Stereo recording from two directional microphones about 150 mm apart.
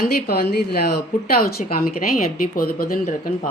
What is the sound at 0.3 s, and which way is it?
A woman's voice, 90° left.